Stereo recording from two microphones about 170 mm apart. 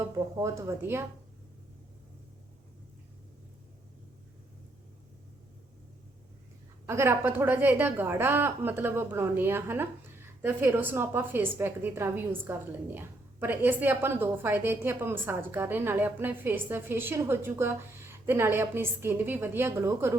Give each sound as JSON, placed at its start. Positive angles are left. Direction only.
{"t": 0.0, "sound": "a woman's voice", "side_deg": -20}
{"t": 6.8, "sound": "a woman's voice", "side_deg": -15}